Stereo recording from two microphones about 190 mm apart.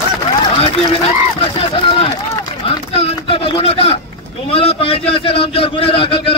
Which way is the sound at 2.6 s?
30° left (ahead or behind).